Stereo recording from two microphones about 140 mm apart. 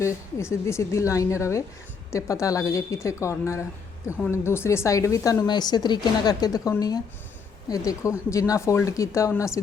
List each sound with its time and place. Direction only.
0.0 s speech: 20° left (ahead or behind)